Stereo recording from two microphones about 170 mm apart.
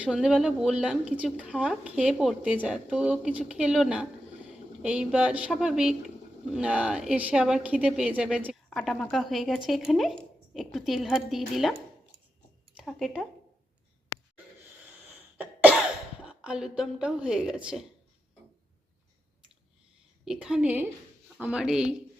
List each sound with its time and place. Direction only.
0.0 s a woman's voice: 5° right (ahead or behind)
12.7 s speech: centre (ahead or behind)
14.9 s cough: 10° right (ahead or behind)
16.2 s speech: 5° right (ahead or behind)
20.2 s speech: 5° right (ahead or behind)